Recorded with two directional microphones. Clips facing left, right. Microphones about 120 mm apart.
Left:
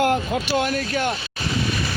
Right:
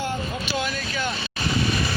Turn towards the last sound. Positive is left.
turn(degrees=60)  # may be behind; listen again after turning